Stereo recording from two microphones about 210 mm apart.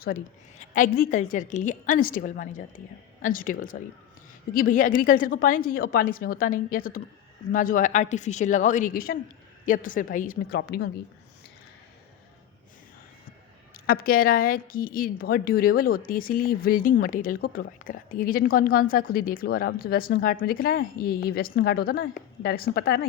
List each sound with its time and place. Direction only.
0.6 s a woman's voice: 40° left (ahead or behind)
13.7 s a woman's voice: 45° left (ahead or behind)